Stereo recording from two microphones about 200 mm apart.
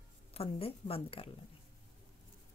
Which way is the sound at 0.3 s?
30° left (ahead or behind).